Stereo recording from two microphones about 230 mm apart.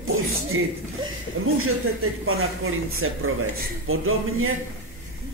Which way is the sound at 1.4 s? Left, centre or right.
Right.